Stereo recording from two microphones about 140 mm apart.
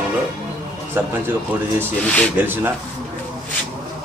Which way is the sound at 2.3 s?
15° right (ahead or behind).